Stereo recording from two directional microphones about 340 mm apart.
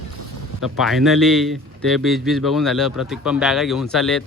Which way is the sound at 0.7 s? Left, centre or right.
Centre.